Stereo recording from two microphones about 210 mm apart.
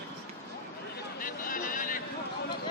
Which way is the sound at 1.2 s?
40° left (ahead or behind).